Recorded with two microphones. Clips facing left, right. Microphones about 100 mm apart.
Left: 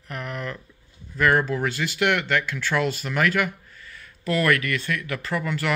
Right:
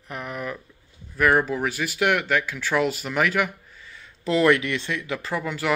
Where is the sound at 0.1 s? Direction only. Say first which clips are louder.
Right 1 dB; 15° right (ahead or behind).